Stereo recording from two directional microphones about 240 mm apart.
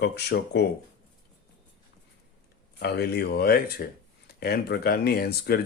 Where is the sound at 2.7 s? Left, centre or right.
Left.